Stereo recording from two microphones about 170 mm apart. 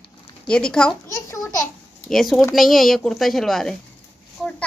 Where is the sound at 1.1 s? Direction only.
20° left (ahead or behind).